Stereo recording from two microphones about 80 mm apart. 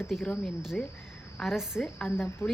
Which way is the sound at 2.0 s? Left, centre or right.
Left.